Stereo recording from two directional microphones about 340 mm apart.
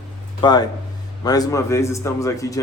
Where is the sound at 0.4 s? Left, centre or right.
Centre.